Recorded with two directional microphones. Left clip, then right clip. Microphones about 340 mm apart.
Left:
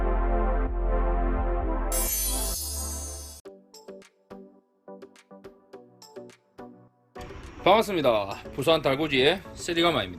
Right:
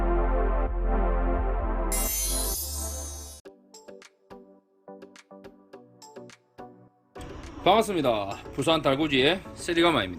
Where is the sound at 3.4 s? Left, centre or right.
Centre.